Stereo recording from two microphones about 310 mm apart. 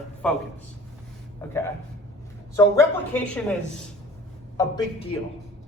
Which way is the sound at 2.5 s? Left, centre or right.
Centre.